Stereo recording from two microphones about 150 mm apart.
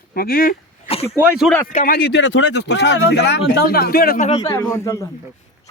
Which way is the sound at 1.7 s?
80° left.